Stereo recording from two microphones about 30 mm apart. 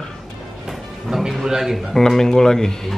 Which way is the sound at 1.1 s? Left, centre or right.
Centre.